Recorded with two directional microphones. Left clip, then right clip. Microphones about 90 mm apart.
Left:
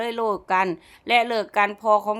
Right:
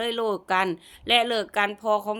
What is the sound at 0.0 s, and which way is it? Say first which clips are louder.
A woman's voice: left 2 dB; 30° left (ahead or behind).